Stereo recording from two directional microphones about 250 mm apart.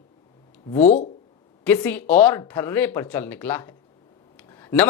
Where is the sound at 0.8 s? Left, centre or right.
Left.